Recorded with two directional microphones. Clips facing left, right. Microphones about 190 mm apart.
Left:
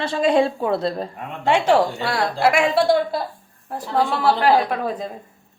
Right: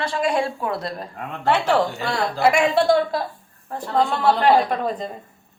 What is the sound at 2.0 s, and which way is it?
A woman's voice, centre (ahead or behind).